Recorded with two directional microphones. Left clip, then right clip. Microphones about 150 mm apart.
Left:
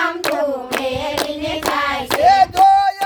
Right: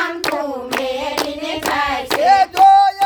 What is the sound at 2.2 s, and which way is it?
Child singing, 20° left (ahead or behind).